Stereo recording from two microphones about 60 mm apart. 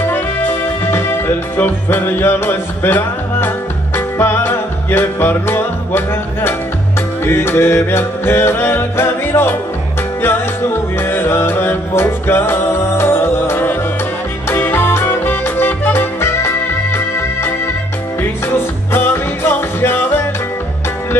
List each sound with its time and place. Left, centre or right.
0.0 s music: left
18.9 s music: left